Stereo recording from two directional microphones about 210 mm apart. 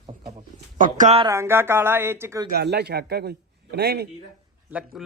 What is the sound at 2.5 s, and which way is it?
A man's voice, 50° right (ahead or behind).